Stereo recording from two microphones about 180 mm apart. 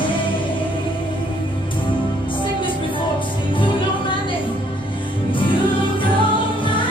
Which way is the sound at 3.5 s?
25° left (ahead or behind).